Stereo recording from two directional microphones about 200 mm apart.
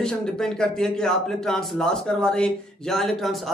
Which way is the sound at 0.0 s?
5° left (ahead or behind).